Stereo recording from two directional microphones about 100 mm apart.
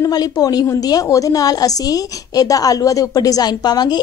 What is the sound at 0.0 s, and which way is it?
A woman's voice, 40° left (ahead or behind).